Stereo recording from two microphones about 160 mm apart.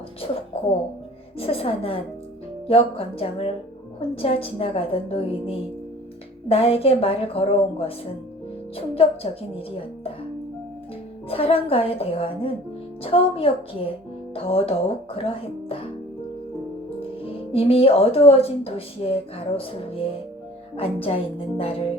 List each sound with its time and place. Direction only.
1.4 s speech: 35° left (ahead or behind)
9.0 s speech: 35° left (ahead or behind)
11.3 s speech: 35° left (ahead or behind)
17.0 s speech: 35° left (ahead or behind)